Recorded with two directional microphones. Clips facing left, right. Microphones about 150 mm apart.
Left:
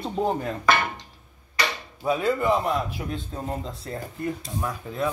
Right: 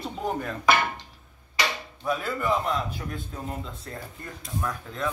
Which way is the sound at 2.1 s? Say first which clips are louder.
Left 4 dB; 20° left (ahead or behind).